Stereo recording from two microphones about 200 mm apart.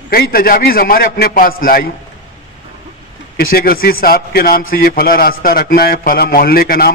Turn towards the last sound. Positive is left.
turn(degrees=50)  # may be behind; listen again after turning